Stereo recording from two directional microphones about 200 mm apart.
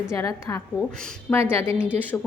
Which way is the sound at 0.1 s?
15° left (ahead or behind).